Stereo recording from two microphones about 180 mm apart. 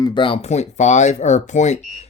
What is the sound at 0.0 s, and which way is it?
Speech, 25° left (ahead or behind).